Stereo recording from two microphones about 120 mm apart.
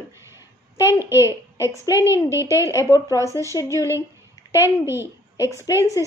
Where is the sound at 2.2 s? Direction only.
25° right (ahead or behind).